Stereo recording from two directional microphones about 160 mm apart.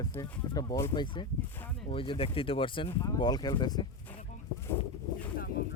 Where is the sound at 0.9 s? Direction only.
30° left (ahead or behind).